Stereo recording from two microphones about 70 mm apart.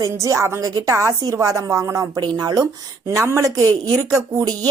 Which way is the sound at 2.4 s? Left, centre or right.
Right.